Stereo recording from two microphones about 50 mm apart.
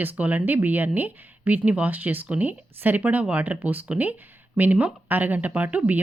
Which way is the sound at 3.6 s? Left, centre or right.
Right.